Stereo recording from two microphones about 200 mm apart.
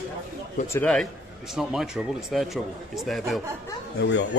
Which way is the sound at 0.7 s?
5° left (ahead or behind).